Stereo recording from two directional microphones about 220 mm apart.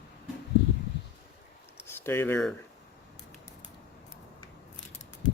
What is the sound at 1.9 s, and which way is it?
Speech, 10° left (ahead or behind).